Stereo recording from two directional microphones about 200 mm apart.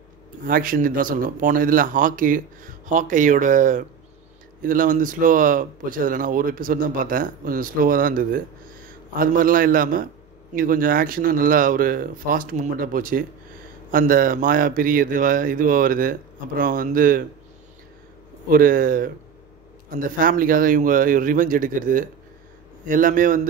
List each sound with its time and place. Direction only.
0.5 s speech: 45° right (ahead or behind)
18.5 s speech: 45° right (ahead or behind)